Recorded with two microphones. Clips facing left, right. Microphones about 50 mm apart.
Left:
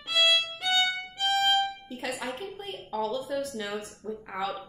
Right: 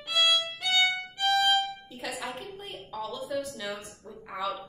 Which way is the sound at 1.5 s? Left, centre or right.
Centre.